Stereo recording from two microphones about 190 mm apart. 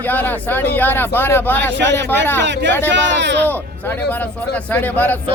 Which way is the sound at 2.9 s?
65° right (ahead or behind).